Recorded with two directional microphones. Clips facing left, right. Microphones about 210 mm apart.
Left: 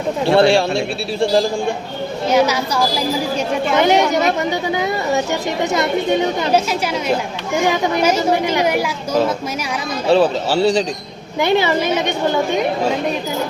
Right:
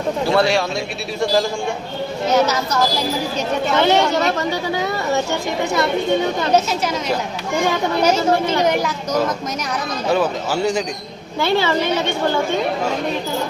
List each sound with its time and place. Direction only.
0.3 s speech: 30° left (ahead or behind)
2.3 s a woman's voice: 10° left (ahead or behind)
5.7 s speech: 20° left (ahead or behind)
7.7 s a woman's voice: 15° left (ahead or behind)
10.1 s speech: 30° left (ahead or behind)
11.3 s a woman's voice: 15° left (ahead or behind)